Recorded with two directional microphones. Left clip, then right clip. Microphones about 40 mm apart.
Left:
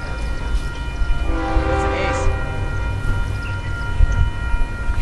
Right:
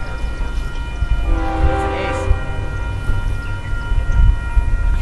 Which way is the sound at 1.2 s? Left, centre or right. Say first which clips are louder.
Even; centre.